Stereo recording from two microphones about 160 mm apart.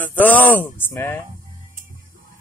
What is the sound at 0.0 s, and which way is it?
Speech, 10° left (ahead or behind).